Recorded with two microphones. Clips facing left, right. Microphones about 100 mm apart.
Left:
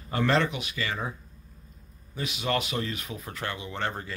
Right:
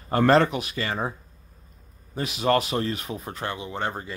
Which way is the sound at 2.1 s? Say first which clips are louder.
Right 6 dB; 40° right (ahead or behind).